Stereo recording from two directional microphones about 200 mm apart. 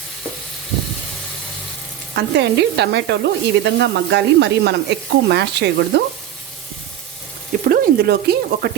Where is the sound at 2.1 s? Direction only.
55° right (ahead or behind).